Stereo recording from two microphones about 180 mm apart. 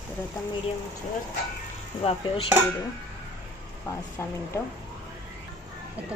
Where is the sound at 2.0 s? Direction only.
30° left (ahead or behind).